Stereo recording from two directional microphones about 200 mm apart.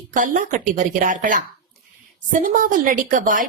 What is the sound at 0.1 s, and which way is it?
A woman's voice, 40° right (ahead or behind).